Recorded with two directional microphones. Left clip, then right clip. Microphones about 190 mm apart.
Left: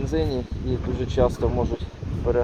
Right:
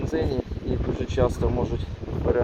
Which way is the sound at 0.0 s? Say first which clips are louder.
Left 1 dB; 10° left (ahead or behind).